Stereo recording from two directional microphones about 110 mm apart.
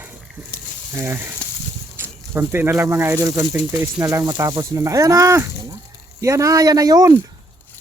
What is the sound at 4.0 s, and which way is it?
Speech, 30° right (ahead or behind).